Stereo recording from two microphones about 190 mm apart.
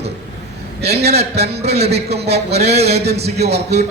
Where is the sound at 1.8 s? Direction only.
35° right (ahead or behind).